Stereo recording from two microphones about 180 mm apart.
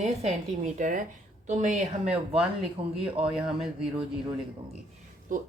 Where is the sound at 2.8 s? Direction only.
30° right (ahead or behind).